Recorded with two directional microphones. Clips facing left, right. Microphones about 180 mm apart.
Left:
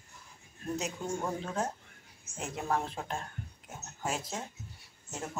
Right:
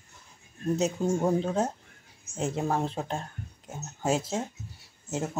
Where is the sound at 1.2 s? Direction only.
25° right (ahead or behind).